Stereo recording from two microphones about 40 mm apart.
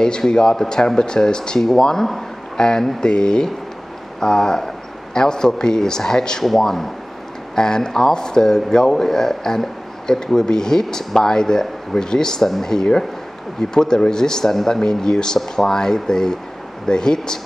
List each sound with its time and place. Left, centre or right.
0.3 s speech: centre